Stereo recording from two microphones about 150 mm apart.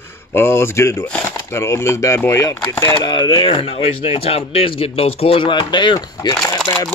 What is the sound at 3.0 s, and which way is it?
Speech, 30° left (ahead or behind).